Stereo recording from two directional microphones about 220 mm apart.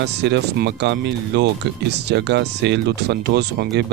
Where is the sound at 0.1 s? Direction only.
50° right (ahead or behind).